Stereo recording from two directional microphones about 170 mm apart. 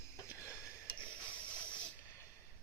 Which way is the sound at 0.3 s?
15° left (ahead or behind).